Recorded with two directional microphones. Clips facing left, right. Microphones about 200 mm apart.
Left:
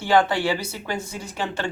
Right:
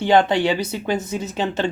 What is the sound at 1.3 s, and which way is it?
Speech, 20° right (ahead or behind).